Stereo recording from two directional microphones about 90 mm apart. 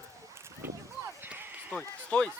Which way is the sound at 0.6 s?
25° right (ahead or behind).